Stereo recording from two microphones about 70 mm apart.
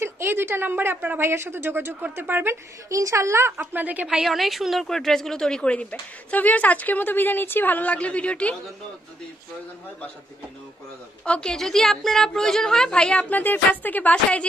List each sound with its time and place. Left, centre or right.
0.0 s a woman's voice: right
2.9 s a woman's voice: right
3.5 s a woman's voice: right
4.1 s a woman's voice: centre
11.2 s a woman's voice: centre
11.5 s a woman's voice: centre
13.3 s a woman's voice: left